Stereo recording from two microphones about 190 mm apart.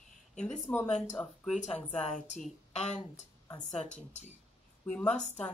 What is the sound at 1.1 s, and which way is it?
Speech, 5° left (ahead or behind).